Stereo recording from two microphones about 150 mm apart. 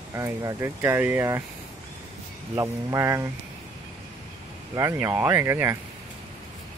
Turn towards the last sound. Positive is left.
turn(degrees=-15)  # may be behind; listen again after turning